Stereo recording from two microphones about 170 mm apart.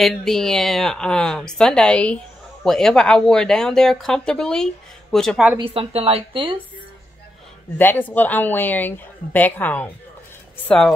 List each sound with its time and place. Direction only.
0.0 s a woman's voice: centre (ahead or behind)
5.6 s a woman's voice: 35° right (ahead or behind)
7.7 s a woman's voice: 10° left (ahead or behind)